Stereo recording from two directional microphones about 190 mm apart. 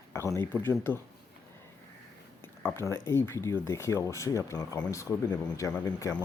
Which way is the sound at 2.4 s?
10° left (ahead or behind).